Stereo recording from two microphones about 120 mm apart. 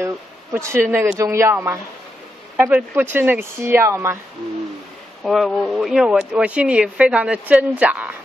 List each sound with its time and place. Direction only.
0.0 s speech: 25° right (ahead or behind)
5.2 s speech: centre (ahead or behind)